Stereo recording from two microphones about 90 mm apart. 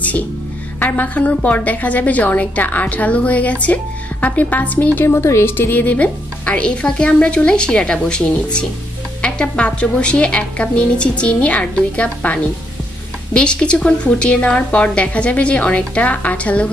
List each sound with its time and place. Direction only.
0.7 s a woman's voice: 20° left (ahead or behind)